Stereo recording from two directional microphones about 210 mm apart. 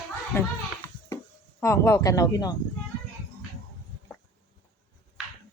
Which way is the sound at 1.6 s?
15° left (ahead or behind).